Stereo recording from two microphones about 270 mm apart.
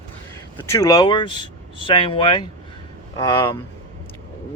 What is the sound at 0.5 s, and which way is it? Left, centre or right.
Speech, centre.